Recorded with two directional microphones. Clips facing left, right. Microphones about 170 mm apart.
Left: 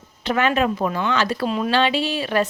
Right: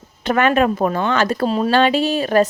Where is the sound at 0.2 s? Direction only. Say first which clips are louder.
Right 4 dB; 50° right (ahead or behind).